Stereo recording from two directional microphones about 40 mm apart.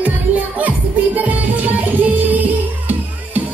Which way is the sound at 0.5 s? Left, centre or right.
Right.